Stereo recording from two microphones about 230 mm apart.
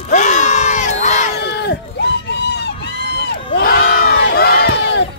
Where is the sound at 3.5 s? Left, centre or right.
Left.